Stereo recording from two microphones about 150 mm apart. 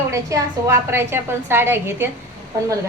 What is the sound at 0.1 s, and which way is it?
A woman's voice, 20° right (ahead or behind).